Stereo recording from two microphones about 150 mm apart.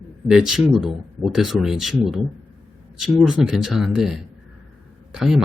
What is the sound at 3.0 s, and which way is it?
Speech, 5° right (ahead or behind).